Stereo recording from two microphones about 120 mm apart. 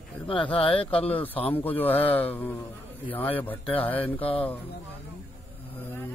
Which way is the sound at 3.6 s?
50° left (ahead or behind).